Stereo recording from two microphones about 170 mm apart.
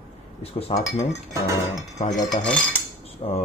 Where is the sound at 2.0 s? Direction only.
45° left (ahead or behind).